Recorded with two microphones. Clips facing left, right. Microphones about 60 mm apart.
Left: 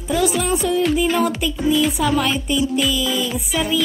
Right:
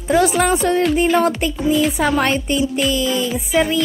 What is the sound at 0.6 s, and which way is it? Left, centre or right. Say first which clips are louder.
Speech: right 2 dB; right.